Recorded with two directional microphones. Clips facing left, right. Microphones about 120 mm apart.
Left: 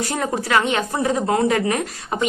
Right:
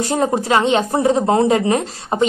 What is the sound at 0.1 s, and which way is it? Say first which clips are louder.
A woman's voice: right 5 dB; 25° right (ahead or behind).